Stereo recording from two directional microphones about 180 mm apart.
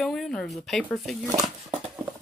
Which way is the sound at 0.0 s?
Centre (ahead or behind).